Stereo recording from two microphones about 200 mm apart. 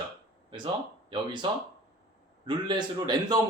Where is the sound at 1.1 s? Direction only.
25° right (ahead or behind).